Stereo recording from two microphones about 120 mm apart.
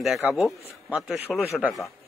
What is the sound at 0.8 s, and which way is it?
Speech, 10° right (ahead or behind).